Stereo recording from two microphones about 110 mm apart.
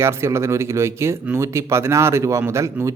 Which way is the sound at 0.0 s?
25° right (ahead or behind).